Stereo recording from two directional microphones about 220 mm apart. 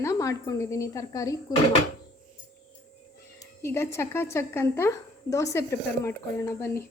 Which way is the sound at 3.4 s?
10° left (ahead or behind).